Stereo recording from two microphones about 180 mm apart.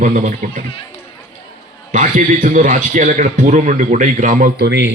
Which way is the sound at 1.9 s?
45° right (ahead or behind).